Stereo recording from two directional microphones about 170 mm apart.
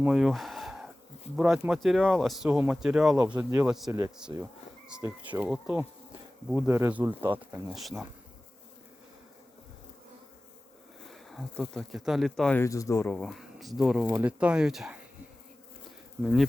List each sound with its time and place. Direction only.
0.0 s speech: 5° right (ahead or behind); by 5.4 s 25° right (ahead or behind)
5.4 s speech: 5° right (ahead or behind)
7.7 s speech: centre (ahead or behind)
11.1 s speech: centre (ahead or behind)
12.6 s speech: 20° left (ahead or behind)
13.1 s speech: centre (ahead or behind)
16.2 s speech: centre (ahead or behind)